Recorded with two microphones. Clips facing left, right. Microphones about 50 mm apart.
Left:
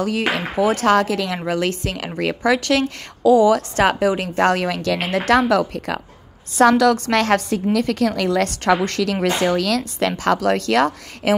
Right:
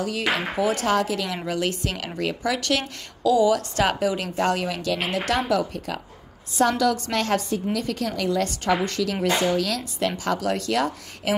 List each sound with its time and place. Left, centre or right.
0.0 s a woman's voice: left
0.8 s a woman's voice: left
1.4 s a woman's voice: left
6.8 s a woman's voice: left